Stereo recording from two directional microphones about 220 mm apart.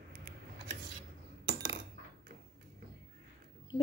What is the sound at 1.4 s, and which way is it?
Coin, 50° right (ahead or behind).